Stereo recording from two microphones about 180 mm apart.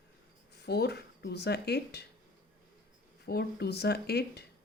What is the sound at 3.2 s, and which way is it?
Speech, 65° left (ahead or behind).